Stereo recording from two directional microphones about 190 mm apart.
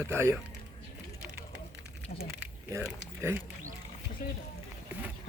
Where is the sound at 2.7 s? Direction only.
15° right (ahead or behind).